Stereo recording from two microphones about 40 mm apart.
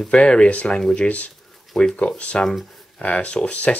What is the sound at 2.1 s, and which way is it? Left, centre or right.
Speech, left.